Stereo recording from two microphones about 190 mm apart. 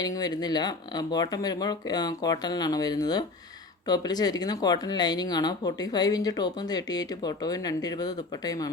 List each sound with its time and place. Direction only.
0.0 s speech: 20° left (ahead or behind)